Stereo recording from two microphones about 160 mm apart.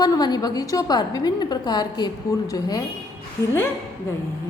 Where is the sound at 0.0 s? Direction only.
25° left (ahead or behind).